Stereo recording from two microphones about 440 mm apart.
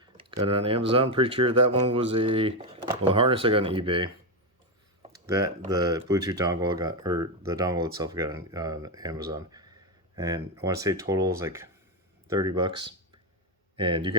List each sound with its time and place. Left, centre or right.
0.0 s a sound: centre
0.4 s speech: centre
5.2 s speech: centre